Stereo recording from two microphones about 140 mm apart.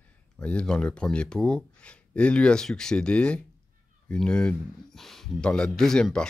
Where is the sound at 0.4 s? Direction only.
5° left (ahead or behind).